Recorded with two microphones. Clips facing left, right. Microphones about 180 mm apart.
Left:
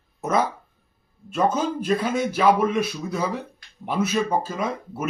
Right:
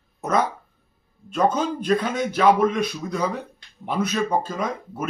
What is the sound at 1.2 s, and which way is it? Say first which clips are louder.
Speech: right 1 dB; 5° left (ahead or behind).